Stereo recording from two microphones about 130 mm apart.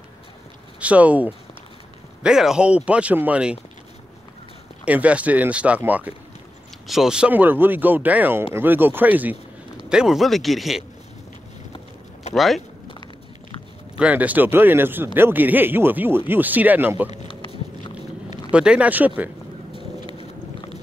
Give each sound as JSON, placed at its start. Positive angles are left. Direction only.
{"t": 0.7, "sound": "speech", "side_deg": -10}
{"t": 4.8, "sound": "speech", "side_deg": -10}
{"t": 12.4, "sound": "speech", "side_deg": 0}
{"t": 13.9, "sound": "speech", "side_deg": -10}
{"t": 18.5, "sound": "speech", "side_deg": -10}
{"t": 20.0, "sound": "thunder", "side_deg": -35}